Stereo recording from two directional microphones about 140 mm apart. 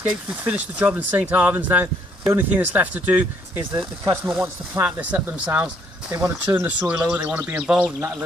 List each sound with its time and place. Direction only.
0.0 s speech: 10° right (ahead or behind)
3.7 s speech: 25° right (ahead or behind)
4.7 s speech: 15° right (ahead or behind)
7.6 s speech: centre (ahead or behind)